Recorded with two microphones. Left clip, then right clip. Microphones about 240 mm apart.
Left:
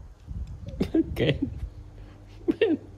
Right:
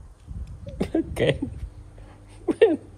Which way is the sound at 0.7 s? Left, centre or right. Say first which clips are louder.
Even; left.